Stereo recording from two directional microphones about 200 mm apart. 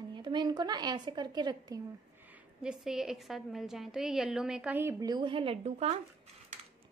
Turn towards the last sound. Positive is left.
turn(degrees=-30)  # may be behind; listen again after turning